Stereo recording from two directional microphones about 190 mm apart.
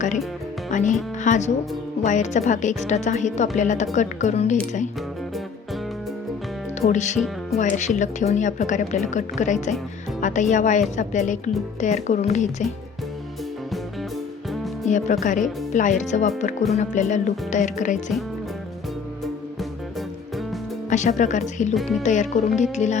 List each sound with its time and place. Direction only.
0.7 s speech: 40° left (ahead or behind)
6.8 s speech: 40° left (ahead or behind)
14.8 s speech: 40° left (ahead or behind)
20.9 s speech: 40° left (ahead or behind)